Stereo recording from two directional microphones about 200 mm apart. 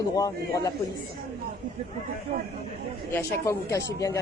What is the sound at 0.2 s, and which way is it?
Speech, 15° left (ahead or behind).